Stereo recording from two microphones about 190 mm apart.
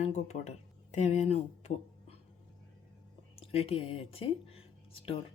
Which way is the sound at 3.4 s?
30° left (ahead or behind).